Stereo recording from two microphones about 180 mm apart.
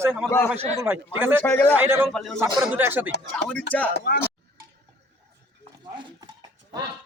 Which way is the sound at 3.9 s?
65° left (ahead or behind).